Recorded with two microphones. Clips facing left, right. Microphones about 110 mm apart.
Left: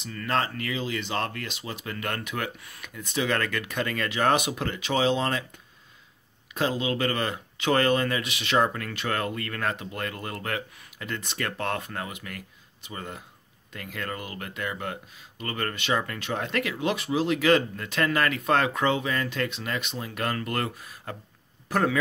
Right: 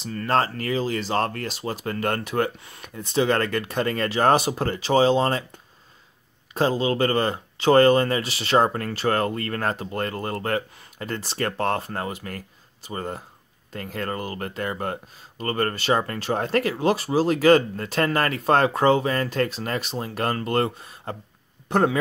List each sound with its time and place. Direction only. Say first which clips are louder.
0.0 s speech: right 5 dB; 35° right (ahead or behind)
6.5 s speech: right 5 dB; 35° right (ahead or behind)